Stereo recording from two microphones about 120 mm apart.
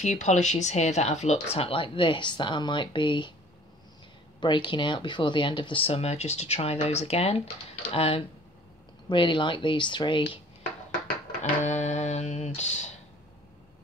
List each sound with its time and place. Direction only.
0.0 s speech: 80° left; by 3.3 s 40° left (ahead or behind)
4.4 s speech: 40° left (ahead or behind)
9.1 s speech: 40° left (ahead or behind)
11.6 s music: 75° left (ahead or behind)